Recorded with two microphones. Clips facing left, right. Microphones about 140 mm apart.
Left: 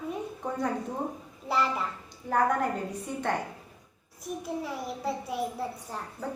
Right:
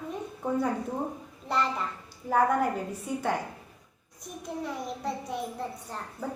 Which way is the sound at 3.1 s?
5° right (ahead or behind).